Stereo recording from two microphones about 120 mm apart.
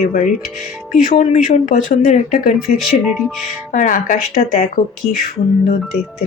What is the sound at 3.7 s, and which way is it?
Speech, 90° left.